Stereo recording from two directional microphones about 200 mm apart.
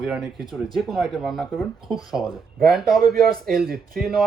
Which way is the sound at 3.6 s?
45° right (ahead or behind).